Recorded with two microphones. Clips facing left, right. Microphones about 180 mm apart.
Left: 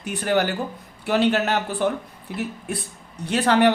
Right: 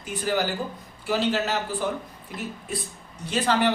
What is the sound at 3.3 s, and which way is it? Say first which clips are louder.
Speech: left 5 dB; 65° left (ahead or behind).